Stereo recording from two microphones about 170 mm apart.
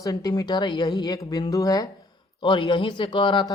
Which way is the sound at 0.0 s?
20° left (ahead or behind).